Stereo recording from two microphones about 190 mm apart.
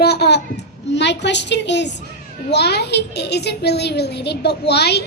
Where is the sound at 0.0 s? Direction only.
60° left (ahead or behind).